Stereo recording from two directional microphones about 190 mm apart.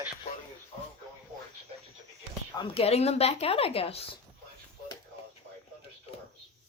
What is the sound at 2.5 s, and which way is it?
Speech, 30° left (ahead or behind).